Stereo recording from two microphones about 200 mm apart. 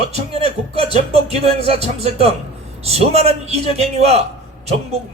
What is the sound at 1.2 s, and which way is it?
Music, 30° right (ahead or behind).